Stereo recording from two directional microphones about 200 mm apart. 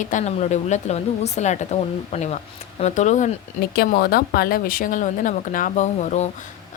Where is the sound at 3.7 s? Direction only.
50° left (ahead or behind).